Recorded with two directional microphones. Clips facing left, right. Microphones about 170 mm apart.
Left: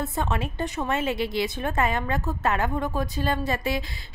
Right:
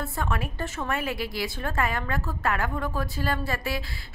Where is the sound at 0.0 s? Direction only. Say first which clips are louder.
Left 3 dB; 20° left (ahead or behind).